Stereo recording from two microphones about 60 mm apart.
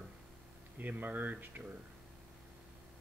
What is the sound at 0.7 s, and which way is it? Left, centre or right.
Speech, right.